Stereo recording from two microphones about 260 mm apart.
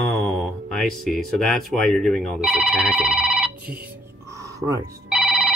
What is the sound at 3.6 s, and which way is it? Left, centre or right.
Music, right.